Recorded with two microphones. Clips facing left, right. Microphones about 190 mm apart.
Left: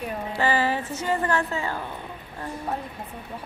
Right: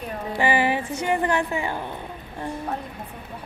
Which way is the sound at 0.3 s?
15° right (ahead or behind).